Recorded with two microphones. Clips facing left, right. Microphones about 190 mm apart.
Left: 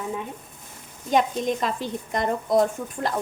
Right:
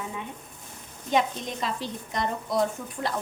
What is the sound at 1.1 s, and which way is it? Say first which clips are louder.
A woman's voice: left 4 dB; 50° left (ahead or behind).